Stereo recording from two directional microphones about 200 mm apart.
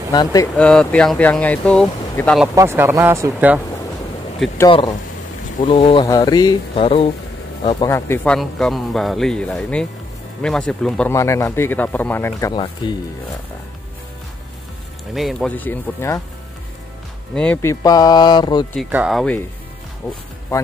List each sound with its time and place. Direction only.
0.1 s speech: 20° left (ahead or behind)
0.6 s speech: 5° left (ahead or behind)
2.4 s speech: 15° right (ahead or behind)
4.6 s speech: 25° left (ahead or behind)
7.8 s speech: 15° left (ahead or behind)
15.1 s speech: centre (ahead or behind)
17.3 s speech: 5° left (ahead or behind); by 18.7 s 20° left (ahead or behind)
18.9 s speech: 5° right (ahead or behind)